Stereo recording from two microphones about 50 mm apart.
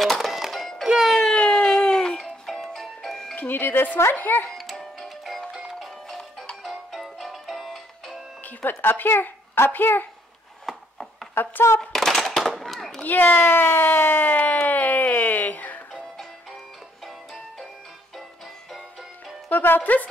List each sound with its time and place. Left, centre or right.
0.0 s music: centre
1.0 s music: centre
3.3 s speech: left
4.5 s music: centre
8.5 s speech: left
10.6 s a sound: centre
11.8 s firecracker: centre
13.0 s speech: left
14.2 s music: left
17.0 s music: centre
19.5 s music: left
19.8 s speech: left